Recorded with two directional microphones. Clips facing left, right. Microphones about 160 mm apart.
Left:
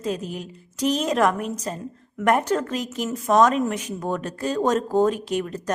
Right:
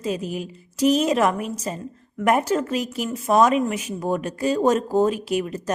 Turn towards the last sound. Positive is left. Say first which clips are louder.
# right 1 dB
turn(degrees=-10)  # may be behind; listen again after turning